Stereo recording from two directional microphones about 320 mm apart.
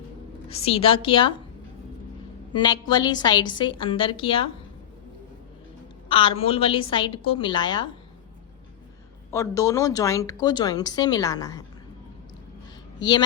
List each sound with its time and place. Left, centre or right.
0.4 s a woman's voice: centre
2.5 s a woman's voice: centre
6.1 s a woman's voice: centre
9.3 s a woman's voice: centre
13.0 s a woman's voice: centre